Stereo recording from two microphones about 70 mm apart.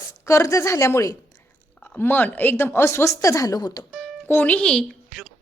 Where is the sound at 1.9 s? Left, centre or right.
Left.